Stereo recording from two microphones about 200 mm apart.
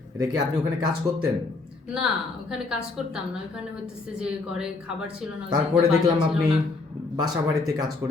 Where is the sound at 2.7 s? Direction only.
5° right (ahead or behind).